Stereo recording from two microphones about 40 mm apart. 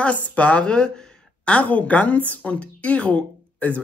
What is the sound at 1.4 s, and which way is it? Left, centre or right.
A woman's voice, left.